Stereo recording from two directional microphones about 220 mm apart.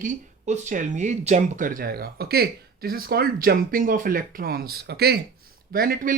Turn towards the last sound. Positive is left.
turn(degrees=-40)  # may be behind; listen again after turning